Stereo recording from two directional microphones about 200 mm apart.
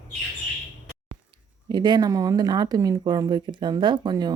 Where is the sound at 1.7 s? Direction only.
20° right (ahead or behind).